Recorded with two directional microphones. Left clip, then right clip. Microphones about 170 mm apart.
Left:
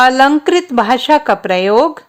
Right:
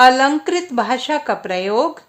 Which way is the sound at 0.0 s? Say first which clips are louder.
Left 3 dB; 40° left (ahead or behind).